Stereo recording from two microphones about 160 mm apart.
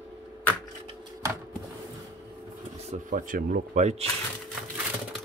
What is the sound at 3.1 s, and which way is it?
Speech, 60° right (ahead or behind).